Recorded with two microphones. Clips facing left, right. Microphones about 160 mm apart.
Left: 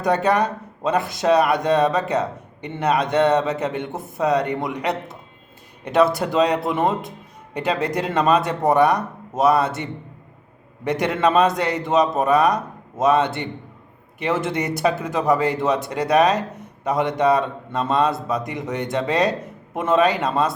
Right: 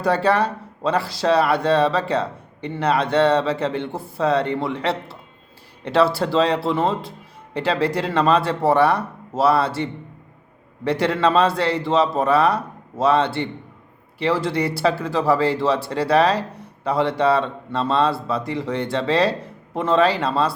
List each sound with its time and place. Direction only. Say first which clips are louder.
0.0 s a man's voice: even; 20° left (ahead or behind)
10.8 s a man's voice: right 1 dB; 20° left (ahead or behind)